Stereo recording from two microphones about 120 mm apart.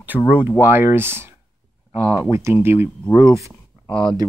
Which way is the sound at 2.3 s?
20° right (ahead or behind).